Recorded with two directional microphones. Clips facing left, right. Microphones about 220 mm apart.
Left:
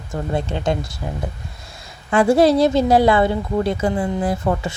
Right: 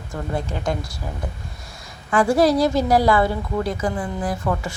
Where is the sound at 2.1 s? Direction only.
25° left (ahead or behind).